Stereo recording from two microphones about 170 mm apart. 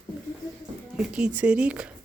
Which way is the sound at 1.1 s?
5° right (ahead or behind).